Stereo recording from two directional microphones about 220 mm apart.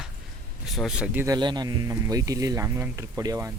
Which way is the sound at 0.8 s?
5° right (ahead or behind).